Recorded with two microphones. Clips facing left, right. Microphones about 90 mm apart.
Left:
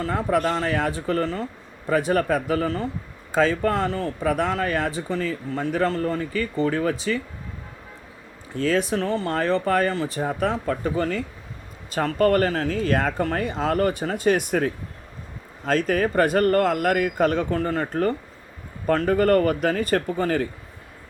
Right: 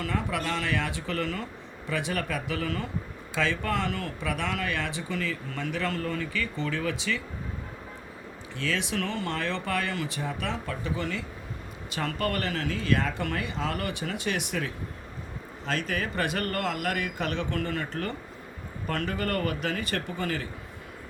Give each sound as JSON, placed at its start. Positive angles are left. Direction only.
{"t": 0.0, "sound": "speech", "side_deg": 35}
{"t": 8.5, "sound": "speech", "side_deg": 40}